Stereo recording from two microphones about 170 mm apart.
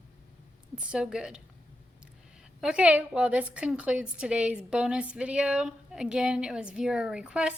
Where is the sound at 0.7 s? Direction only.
5° right (ahead or behind).